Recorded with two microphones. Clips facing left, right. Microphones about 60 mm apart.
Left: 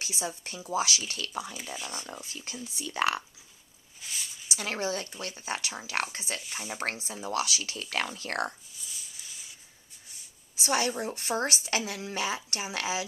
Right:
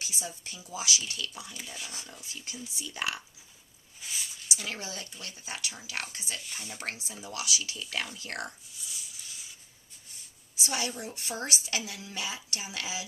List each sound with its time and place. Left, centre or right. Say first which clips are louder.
0.0 s speech: left 4 dB; left
2.4 s speech: left 1 dB; left
4.0 s a sound: even; centre
4.5 s speech: left 7 dB; left
6.5 s speech: left 7 dB; left
8.7 s a sound: even; centre
10.6 s speech: left 6 dB; left